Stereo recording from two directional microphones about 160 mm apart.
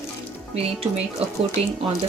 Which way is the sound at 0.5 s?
40° right (ahead or behind).